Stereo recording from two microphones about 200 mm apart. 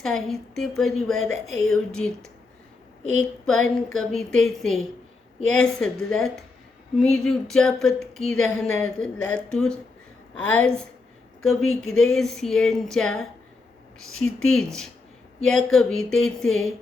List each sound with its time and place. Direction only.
0.0 s speech: centre (ahead or behind)
1.3 s a woman's voice: 90° left
1.7 s speech: 5° left (ahead or behind)
9.1 s a woman's voice: 85° left
9.5 s a woman's voice: 5° left (ahead or behind)